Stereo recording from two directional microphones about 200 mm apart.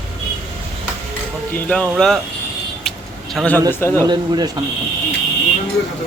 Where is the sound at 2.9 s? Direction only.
Centre (ahead or behind).